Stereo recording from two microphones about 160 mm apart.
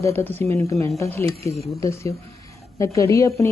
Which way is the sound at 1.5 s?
Centre (ahead or behind).